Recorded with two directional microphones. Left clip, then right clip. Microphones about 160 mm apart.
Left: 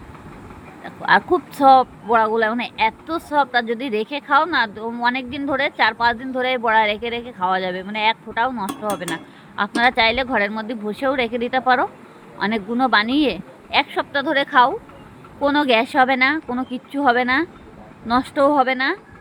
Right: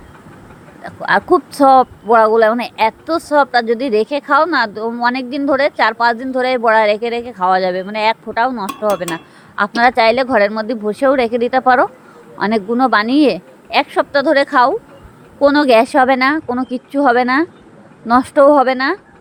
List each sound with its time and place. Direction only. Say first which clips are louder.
0.9 s a woman's voice: right 3 dB; 45° right (ahead or behind)